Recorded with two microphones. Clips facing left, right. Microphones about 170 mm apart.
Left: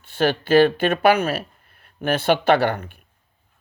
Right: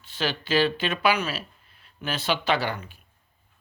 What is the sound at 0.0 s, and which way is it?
Speech, 55° left (ahead or behind).